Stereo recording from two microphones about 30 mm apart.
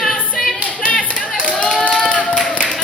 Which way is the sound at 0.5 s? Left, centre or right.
Left.